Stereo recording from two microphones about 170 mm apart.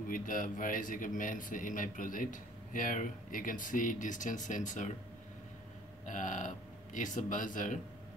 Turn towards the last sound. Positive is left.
turn(degrees=50)  # may be behind; listen again after turning